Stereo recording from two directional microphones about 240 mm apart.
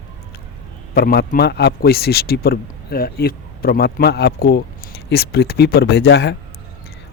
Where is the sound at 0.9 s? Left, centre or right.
Left.